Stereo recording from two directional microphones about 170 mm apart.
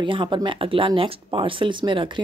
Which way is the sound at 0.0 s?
30° right (ahead or behind).